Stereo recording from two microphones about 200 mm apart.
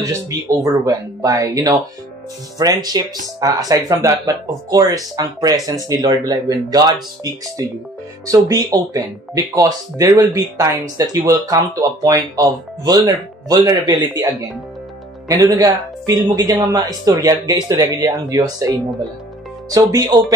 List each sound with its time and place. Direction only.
0.0 s speech: 15° right (ahead or behind)
8.3 s speech: 15° right (ahead or behind)
15.2 s speech: 15° right (ahead or behind)
19.7 s speech: 20° right (ahead or behind)